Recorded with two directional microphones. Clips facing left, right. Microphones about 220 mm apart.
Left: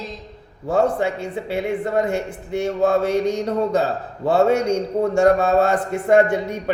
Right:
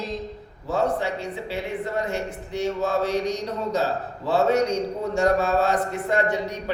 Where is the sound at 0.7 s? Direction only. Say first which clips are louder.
Left 5 dB; 55° left (ahead or behind).